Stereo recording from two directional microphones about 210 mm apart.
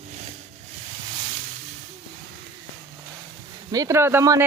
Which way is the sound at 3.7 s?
15° right (ahead or behind).